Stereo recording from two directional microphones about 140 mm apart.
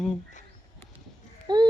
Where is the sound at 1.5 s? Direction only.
30° right (ahead or behind).